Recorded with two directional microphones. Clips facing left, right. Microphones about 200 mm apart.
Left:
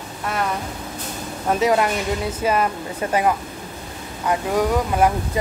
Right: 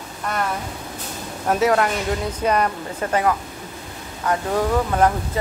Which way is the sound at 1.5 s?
5° right (ahead or behind).